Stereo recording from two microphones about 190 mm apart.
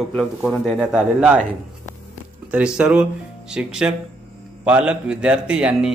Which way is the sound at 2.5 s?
5° right (ahead or behind).